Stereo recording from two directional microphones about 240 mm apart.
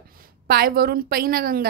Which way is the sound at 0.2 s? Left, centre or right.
Right.